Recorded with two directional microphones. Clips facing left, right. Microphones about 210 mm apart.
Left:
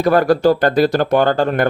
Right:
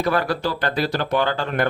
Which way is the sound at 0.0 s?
45° left (ahead or behind).